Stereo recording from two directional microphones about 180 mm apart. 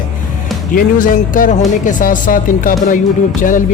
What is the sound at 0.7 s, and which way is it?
Speech, 50° left (ahead or behind).